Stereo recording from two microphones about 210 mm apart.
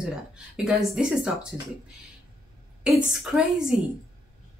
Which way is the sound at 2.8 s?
Centre (ahead or behind).